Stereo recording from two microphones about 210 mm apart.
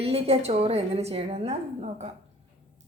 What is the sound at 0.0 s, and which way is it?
A woman's voice, 30° right (ahead or behind).